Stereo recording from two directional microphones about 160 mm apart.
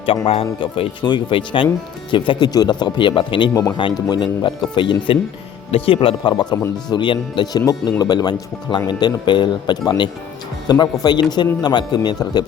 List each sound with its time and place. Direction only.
0.3 s speech: 35° left (ahead or behind)